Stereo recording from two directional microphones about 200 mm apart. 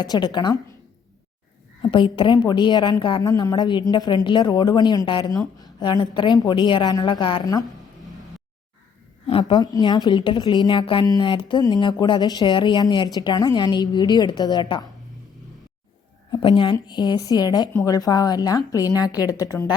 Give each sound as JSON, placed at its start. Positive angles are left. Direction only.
{"t": 0.0, "sound": "a woman's voice", "side_deg": 20}
{"t": 1.8, "sound": "a woman's voice", "side_deg": 25}
{"t": 9.2, "sound": "a woman's voice", "side_deg": 25}
{"t": 16.3, "sound": "a woman's voice", "side_deg": 25}